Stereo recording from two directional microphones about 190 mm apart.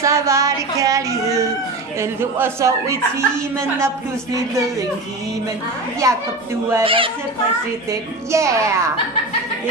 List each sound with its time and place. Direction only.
0.0 s a man's voice: 15° right (ahead or behind)
6.0 s a man's voice: 15° right (ahead or behind)
6.8 s speech: 30° right (ahead or behind)
7.9 s a man's voice: 15° right (ahead or behind)